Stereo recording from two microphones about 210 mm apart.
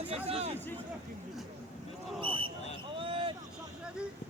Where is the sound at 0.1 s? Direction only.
30° right (ahead or behind).